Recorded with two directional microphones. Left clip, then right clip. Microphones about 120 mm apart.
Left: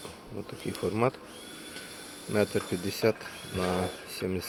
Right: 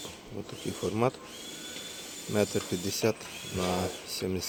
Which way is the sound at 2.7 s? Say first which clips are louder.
Left 2 dB; 20° right (ahead or behind).